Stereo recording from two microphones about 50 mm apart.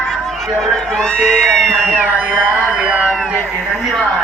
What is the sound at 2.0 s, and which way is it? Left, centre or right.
Speech, right.